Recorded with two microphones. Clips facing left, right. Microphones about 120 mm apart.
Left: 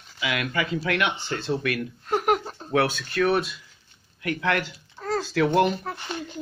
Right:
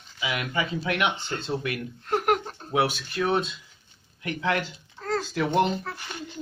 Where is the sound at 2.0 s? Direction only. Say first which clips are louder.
Left 1 dB; 15° left (ahead or behind).